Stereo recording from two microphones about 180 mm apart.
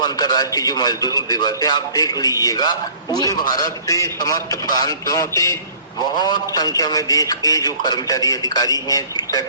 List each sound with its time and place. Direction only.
0.0 s a man's voice: 25° left (ahead or behind)